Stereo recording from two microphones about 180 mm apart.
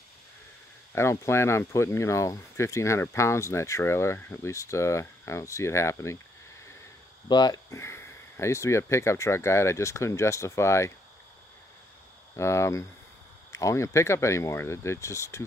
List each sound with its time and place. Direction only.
0.9 s speech: 15° left (ahead or behind)
7.2 s speech: 25° left (ahead or behind)
12.4 s speech: 15° left (ahead or behind)